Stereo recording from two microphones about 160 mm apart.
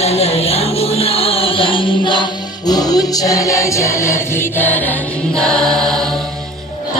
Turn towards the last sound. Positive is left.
turn(degrees=5)  # may be behind; listen again after turning